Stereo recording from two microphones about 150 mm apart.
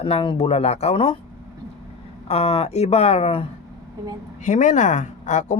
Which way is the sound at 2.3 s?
45° left (ahead or behind).